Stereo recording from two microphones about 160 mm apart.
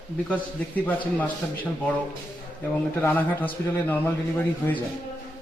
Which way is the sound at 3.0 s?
10° left (ahead or behind).